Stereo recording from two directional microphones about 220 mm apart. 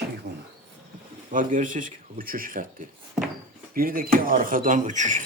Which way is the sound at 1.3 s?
35° right (ahead or behind).